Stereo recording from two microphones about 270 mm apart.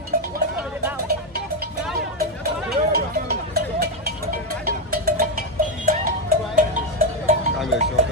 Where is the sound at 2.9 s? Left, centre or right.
Right.